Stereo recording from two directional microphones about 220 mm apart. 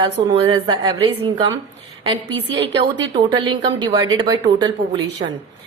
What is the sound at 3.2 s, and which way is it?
A woman's voice, 20° right (ahead or behind).